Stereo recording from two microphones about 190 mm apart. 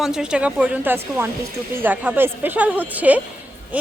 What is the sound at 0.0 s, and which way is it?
Speech, 5° right (ahead or behind).